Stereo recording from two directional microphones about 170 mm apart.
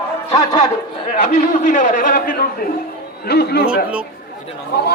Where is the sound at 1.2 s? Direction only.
45° left (ahead or behind).